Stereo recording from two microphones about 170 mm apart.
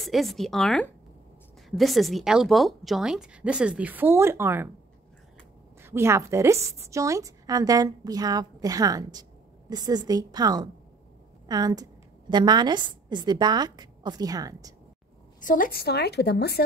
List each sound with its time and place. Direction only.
0.0 s a woman's voice: centre (ahead or behind); by 4.6 s 15° right (ahead or behind)
5.8 s a woman's voice: 15° right (ahead or behind)
15.4 s a woman's voice: 55° left (ahead or behind); by 16.6 s 70° left (ahead or behind)